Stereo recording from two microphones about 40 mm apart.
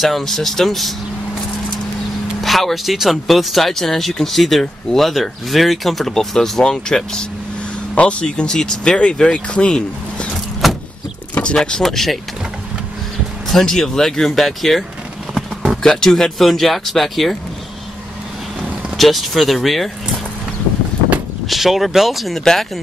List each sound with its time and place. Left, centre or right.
0.0 s speech: centre
2.4 s speech: centre
7.9 s speech: left
10.3 s vehicle: centre
11.8 s speech: centre
13.5 s speech: centre
15.8 s speech: centre
18.9 s speech: centre
21.5 s speech: centre
22.4 s speech: centre